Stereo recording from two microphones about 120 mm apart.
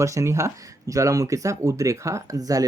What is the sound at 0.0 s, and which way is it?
Speech, 25° right (ahead or behind).